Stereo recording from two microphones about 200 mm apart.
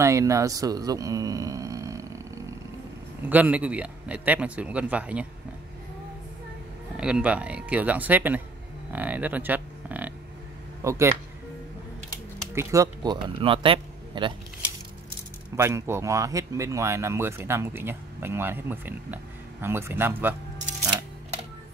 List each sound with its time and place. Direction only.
0.0 s speech: 15° right (ahead or behind)
7.0 s speech: 5° right (ahead or behind)
12.5 s speech: 15° right (ahead or behind)
15.5 s speech: 15° right (ahead or behind)